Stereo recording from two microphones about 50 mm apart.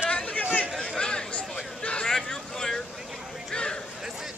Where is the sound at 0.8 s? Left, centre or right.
Centre.